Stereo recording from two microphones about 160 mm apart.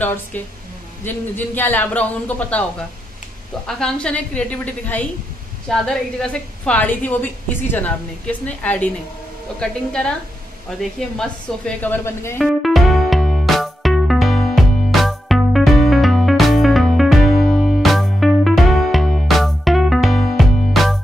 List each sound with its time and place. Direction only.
0.0 s a woman's voice: 10° left (ahead or behind)
3.6 s a woman's voice: 5° left (ahead or behind)
12.4 s music: centre (ahead or behind)